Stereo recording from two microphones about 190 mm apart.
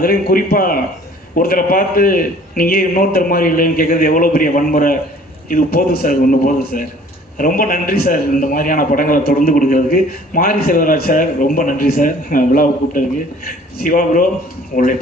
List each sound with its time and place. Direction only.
0.0 s a man's voice: 50° left (ahead or behind)